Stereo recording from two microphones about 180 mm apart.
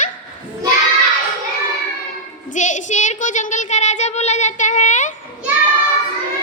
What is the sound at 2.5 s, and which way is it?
Child singing, 45° left (ahead or behind).